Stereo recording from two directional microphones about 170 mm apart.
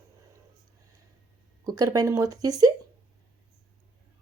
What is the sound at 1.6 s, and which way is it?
Speech, 20° right (ahead or behind).